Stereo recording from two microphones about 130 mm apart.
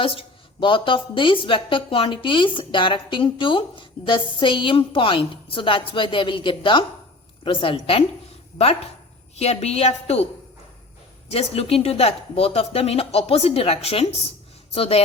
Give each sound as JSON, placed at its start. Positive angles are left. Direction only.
{"t": 0.0, "sound": "a woman's voice", "side_deg": 45}
{"t": 9.3, "sound": "a woman's voice", "side_deg": 55}
{"t": 11.3, "sound": "speech", "side_deg": 50}